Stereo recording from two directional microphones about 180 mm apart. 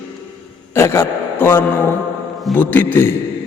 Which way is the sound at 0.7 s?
15° left (ahead or behind).